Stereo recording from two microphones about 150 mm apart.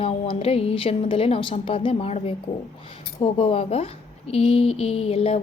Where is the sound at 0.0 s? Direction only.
40° left (ahead or behind).